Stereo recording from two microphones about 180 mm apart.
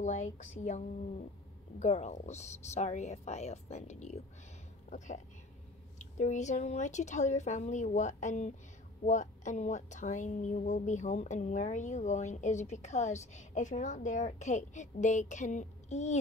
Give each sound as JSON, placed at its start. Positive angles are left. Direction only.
{"t": 0.0, "sound": "a woman's voice", "side_deg": 40}